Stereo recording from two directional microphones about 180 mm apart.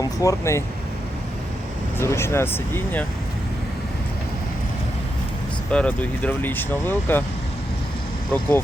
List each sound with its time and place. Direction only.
0.0 s speech: 20° left (ahead or behind)
2.0 s speech: 15° left (ahead or behind)
5.7 s speech: 5° left (ahead or behind)
8.3 s speech: 10° left (ahead or behind)